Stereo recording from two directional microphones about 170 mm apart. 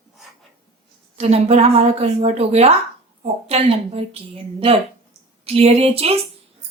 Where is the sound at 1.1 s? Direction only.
35° right (ahead or behind).